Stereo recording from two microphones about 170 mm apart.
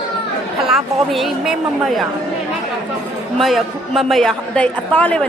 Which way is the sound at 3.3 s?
Centre (ahead or behind).